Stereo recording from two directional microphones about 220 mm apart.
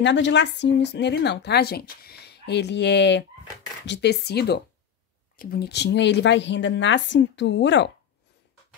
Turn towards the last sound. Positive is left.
turn(degrees=55)  # may be behind; listen again after turning